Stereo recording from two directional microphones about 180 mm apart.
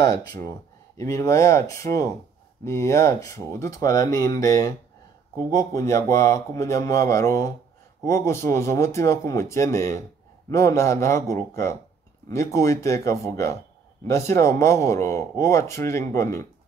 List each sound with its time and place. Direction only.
0.0 s speech: 20° left (ahead or behind)